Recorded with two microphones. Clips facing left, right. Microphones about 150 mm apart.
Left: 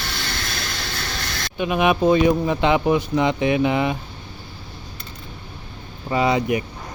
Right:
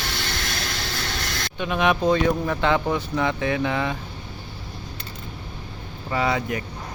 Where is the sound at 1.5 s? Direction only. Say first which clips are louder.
Left 3 dB; 10° left (ahead or behind).